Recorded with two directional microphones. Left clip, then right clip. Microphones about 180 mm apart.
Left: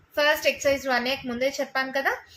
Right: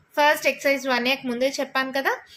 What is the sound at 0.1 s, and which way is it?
A woman's voice, 35° right (ahead or behind).